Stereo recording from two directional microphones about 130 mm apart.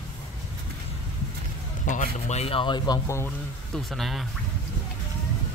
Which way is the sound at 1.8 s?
70° left (ahead or behind).